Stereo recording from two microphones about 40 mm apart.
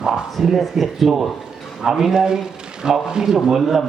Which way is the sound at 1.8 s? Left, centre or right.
Centre.